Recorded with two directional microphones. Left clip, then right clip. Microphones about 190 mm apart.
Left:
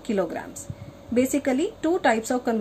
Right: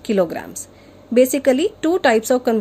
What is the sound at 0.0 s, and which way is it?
A woman's voice, 55° right (ahead or behind).